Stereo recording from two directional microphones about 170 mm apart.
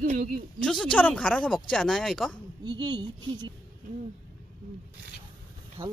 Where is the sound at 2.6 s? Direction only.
25° right (ahead or behind).